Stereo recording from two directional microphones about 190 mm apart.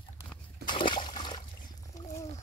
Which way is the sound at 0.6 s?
25° left (ahead or behind).